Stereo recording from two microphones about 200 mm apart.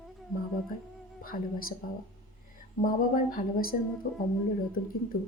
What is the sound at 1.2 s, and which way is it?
Speech, 45° left (ahead or behind).